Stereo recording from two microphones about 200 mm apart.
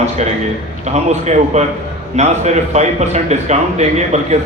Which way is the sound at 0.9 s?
35° right (ahead or behind).